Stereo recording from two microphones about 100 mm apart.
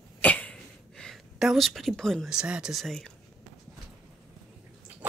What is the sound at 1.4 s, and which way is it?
Speech, 5° right (ahead or behind).